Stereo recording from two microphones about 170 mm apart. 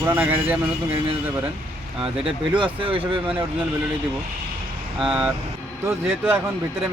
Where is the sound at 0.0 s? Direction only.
10° right (ahead or behind).